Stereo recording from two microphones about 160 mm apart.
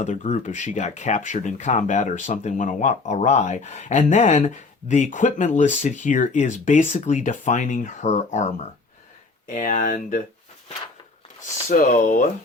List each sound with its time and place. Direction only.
0.0 s speech: 50° left (ahead or behind)
9.5 s speech: 50° left (ahead or behind)
11.4 s speech: 55° left (ahead or behind)